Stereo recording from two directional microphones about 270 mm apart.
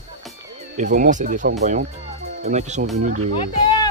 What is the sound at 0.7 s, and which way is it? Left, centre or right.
Speech, right.